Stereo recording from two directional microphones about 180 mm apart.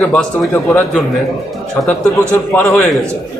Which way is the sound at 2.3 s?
15° left (ahead or behind).